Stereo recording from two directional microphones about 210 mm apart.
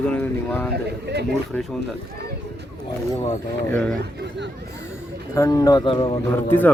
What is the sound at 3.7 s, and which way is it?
Speech, 5° left (ahead or behind).